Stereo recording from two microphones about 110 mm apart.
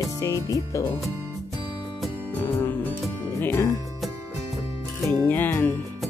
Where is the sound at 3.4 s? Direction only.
20° left (ahead or behind).